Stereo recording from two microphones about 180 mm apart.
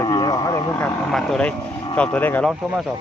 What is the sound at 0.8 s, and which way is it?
Speech, centre (ahead or behind).